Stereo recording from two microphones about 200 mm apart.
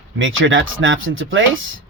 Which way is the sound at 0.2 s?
75° right (ahead or behind).